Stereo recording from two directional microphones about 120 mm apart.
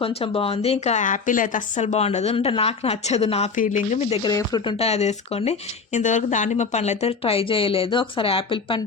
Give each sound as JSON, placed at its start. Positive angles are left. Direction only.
{"t": 0.0, "sound": "a woman's voice", "side_deg": 55}
{"t": 4.2, "sound": "speech", "side_deg": 35}
{"t": 4.8, "sound": "a woman's voice", "side_deg": 65}